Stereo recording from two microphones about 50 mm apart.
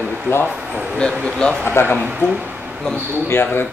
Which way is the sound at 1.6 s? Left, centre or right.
Left.